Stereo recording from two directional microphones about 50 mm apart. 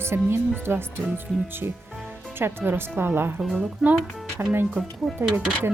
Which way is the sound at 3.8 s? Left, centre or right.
Centre.